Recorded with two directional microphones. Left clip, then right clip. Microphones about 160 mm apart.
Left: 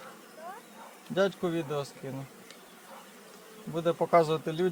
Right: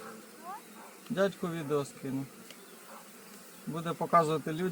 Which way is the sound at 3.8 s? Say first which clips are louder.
Left 3 dB; 45° left (ahead or behind).